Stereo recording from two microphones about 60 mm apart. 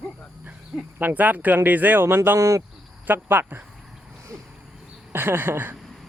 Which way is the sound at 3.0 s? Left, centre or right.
Right.